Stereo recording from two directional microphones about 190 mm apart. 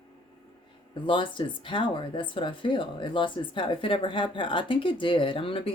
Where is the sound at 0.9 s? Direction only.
25° left (ahead or behind).